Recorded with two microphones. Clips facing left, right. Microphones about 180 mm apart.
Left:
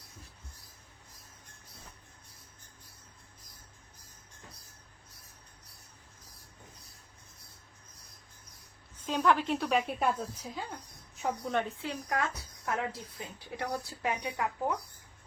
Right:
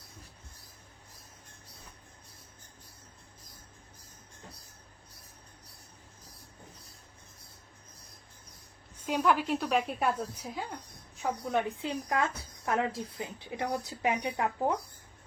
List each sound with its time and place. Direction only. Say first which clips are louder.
9.0 s a woman's voice: even; 5° right (ahead or behind)
11.6 s a woman's voice: right 3 dB; 20° right (ahead or behind)